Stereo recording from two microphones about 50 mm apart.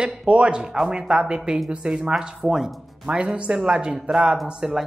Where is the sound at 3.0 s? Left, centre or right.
Right.